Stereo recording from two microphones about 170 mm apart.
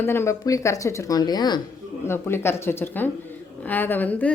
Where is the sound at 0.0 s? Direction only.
15° left (ahead or behind).